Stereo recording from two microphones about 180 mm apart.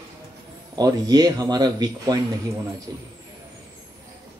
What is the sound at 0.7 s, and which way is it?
A man's voice, 20° right (ahead or behind).